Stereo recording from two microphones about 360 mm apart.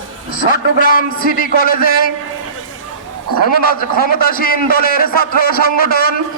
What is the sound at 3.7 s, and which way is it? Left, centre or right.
A man's voice, left.